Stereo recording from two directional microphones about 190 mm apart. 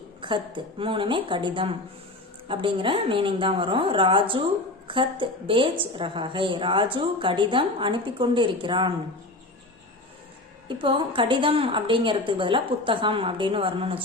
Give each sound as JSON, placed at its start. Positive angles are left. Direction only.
{"t": 0.2, "sound": "a woman's voice", "side_deg": -25}
{"t": 10.7, "sound": "a woman's voice", "side_deg": -25}